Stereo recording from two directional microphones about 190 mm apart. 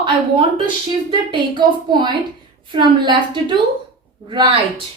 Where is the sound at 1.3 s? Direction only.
25° right (ahead or behind).